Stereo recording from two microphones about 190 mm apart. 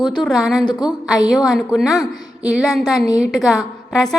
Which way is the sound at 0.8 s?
20° left (ahead or behind).